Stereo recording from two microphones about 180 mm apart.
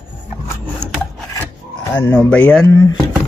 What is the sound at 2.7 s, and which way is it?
Speech, 20° left (ahead or behind).